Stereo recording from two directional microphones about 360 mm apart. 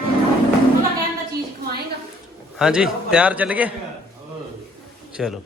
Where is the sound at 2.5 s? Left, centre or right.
Centre.